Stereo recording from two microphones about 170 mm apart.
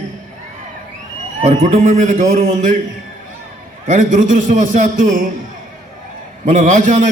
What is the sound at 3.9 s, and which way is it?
A man's voice, 50° right (ahead or behind).